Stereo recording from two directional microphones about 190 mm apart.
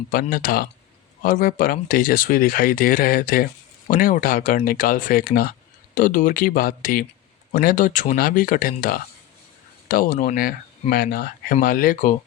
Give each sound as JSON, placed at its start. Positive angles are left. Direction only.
{"t": 0.1, "sound": "speech", "side_deg": 50}